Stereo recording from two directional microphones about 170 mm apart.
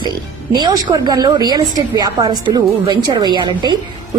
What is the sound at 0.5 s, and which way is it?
A woman's voice, 25° right (ahead or behind).